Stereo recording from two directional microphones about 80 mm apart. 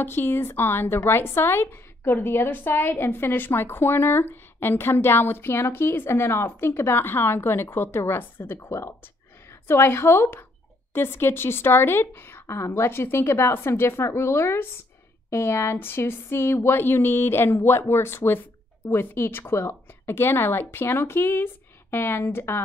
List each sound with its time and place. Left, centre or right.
0.0 s a woman's voice: left